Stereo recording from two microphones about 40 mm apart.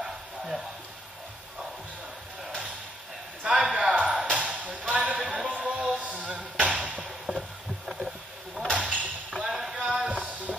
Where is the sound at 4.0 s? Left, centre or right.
Right.